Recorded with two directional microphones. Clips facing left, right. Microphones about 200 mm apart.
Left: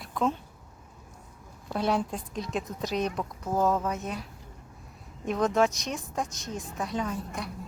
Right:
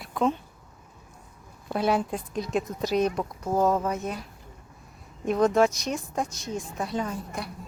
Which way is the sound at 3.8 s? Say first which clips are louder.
Right 3 dB; centre (ahead or behind).